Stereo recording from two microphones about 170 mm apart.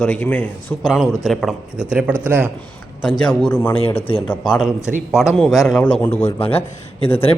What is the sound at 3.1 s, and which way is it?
Speech, 25° left (ahead or behind).